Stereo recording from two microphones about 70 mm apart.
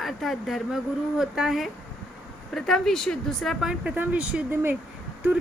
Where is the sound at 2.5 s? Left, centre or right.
Centre.